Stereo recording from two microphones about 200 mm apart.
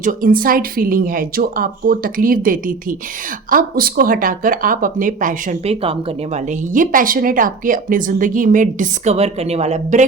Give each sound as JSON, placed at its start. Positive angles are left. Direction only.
{"t": 0.0, "sound": "a woman's voice", "side_deg": -45}
{"t": 5.8, "sound": "speech", "side_deg": -30}